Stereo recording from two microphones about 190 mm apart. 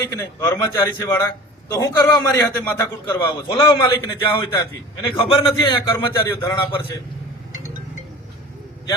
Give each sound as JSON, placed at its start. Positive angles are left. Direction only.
{"t": 0.0, "sound": "a man's voice", "side_deg": 15}
{"t": 6.1, "sound": "a man's voice", "side_deg": 15}